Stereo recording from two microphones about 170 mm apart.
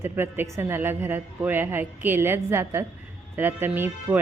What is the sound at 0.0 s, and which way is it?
Speech, 15° right (ahead or behind).